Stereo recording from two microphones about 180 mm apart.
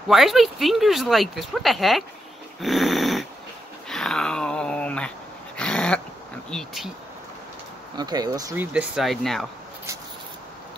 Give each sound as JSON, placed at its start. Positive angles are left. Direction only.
{"t": 0.1, "sound": "speech", "side_deg": 0}
{"t": 2.6, "sound": "dog", "side_deg": 0}
{"t": 3.9, "sound": "a sound", "side_deg": 5}
{"t": 5.6, "sound": "dog", "side_deg": 5}
{"t": 6.5, "sound": "speech", "side_deg": 0}
{"t": 8.0, "sound": "speech", "side_deg": -20}
{"t": 8.7, "sound": "speech", "side_deg": 0}